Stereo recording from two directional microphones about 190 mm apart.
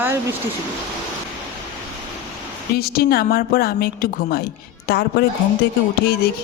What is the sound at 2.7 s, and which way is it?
A woman's voice, 55° left (ahead or behind).